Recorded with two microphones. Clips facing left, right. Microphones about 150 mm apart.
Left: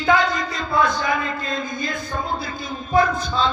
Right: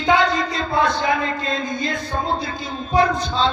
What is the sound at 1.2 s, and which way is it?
Music, 30° right (ahead or behind).